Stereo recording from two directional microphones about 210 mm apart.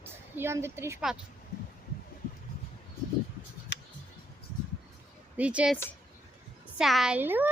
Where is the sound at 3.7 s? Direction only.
55° left (ahead or behind).